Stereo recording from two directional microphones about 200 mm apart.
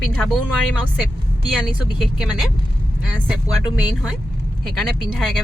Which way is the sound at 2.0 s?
5° right (ahead or behind).